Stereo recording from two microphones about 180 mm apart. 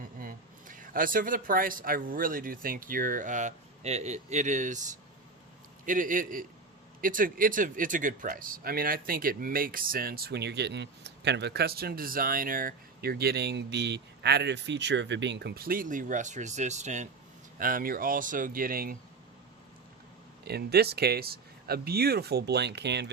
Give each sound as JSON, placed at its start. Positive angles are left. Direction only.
{"t": 0.0, "sound": "speech", "side_deg": -50}
{"t": 5.8, "sound": "speech", "side_deg": -45}
{"t": 20.4, "sound": "speech", "side_deg": -60}